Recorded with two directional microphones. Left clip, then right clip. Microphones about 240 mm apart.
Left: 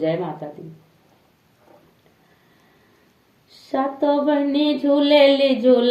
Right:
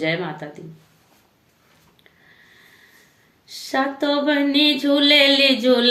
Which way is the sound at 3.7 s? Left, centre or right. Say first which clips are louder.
Left 1 dB; centre.